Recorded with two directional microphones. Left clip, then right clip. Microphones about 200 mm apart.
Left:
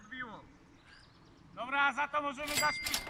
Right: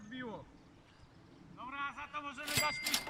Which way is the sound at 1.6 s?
50° left (ahead or behind).